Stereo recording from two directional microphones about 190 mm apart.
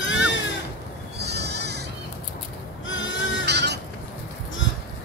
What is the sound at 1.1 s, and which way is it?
Sheep, 60° right (ahead or behind).